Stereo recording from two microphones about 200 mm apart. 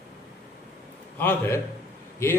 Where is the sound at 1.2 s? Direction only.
10° left (ahead or behind).